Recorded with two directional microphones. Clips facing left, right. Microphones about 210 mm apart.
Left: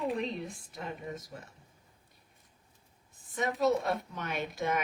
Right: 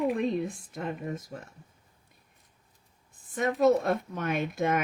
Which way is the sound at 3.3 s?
50° right (ahead or behind).